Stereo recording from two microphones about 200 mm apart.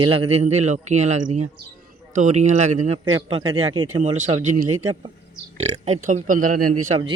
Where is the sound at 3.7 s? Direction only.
90° right.